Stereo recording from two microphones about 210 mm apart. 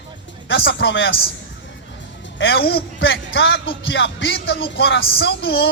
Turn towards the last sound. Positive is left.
turn(degrees=50)  # may be behind; listen again after turning